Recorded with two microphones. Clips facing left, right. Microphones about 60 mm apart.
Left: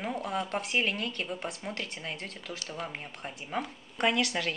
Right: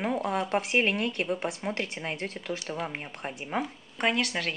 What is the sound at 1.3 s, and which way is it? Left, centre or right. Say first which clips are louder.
Speech: right 6 dB; centre.